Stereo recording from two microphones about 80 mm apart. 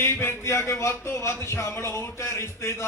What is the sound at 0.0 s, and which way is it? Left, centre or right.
Speech, left.